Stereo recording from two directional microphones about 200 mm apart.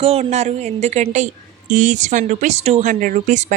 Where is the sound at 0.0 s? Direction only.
30° right (ahead or behind).